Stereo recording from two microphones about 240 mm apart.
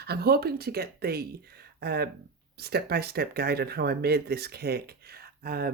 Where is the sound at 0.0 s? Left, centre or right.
Right.